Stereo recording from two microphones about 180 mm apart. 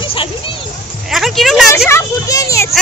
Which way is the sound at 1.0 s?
Centre (ahead or behind).